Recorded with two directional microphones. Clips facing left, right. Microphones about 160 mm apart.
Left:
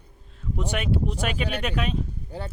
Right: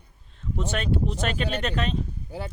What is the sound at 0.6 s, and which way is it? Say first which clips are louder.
Speech: even; 10° left (ahead or behind).